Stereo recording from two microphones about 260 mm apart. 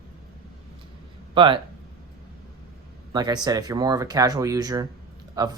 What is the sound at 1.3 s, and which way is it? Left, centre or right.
Speech, centre.